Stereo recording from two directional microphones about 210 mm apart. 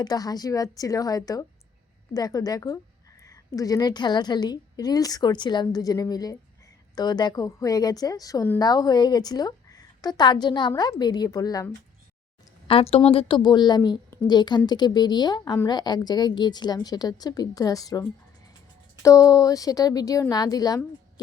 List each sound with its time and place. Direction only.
0.0 s a woman's voice: 20° left (ahead or behind)
12.6 s a woman's voice: 25° left (ahead or behind)
19.0 s speech: 15° left (ahead or behind)